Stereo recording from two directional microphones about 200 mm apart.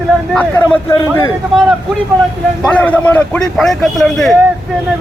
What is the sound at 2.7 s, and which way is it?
A man's voice, 10° left (ahead or behind).